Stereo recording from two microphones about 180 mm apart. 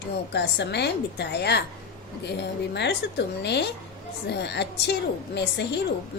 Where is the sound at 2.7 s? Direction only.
70° left (ahead or behind).